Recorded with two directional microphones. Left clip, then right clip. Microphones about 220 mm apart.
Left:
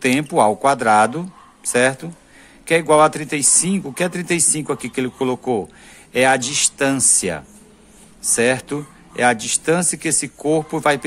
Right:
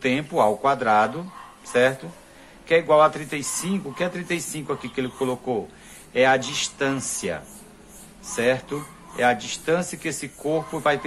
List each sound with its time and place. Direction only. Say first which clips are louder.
0.0 s speech: left 5 dB; 45° left (ahead or behind)